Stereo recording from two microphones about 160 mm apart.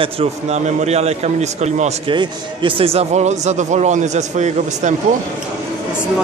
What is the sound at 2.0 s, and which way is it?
Speech, 30° right (ahead or behind).